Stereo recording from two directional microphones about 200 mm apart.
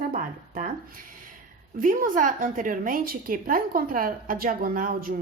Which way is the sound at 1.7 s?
40° right (ahead or behind).